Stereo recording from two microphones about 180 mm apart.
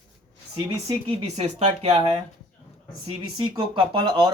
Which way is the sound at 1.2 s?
35° right (ahead or behind).